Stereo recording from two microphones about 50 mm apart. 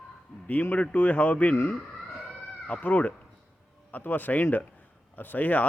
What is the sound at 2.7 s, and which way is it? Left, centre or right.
Speech, left.